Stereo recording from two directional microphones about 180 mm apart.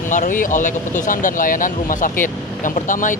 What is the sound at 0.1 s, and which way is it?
Speech, 45° left (ahead or behind).